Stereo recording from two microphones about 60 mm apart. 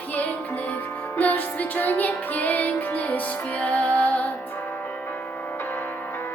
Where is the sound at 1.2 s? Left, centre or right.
Left.